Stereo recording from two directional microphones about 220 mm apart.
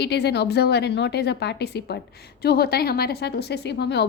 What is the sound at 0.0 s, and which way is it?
A woman's voice, 50° left (ahead or behind).